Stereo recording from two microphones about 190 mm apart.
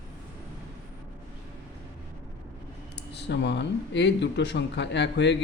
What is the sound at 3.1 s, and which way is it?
Speech, 65° left (ahead or behind).